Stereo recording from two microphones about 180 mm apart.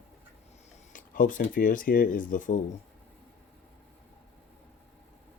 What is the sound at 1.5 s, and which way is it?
Speech, 50° left (ahead or behind).